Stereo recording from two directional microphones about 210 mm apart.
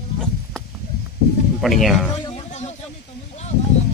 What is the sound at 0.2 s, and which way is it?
Sheep, centre (ahead or behind).